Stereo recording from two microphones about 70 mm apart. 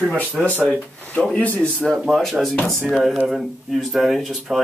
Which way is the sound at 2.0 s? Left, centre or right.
Centre.